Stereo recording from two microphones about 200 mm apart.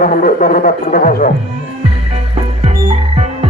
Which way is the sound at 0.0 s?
45° left (ahead or behind).